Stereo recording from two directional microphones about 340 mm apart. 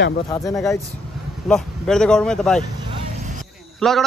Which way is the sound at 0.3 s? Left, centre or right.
Centre.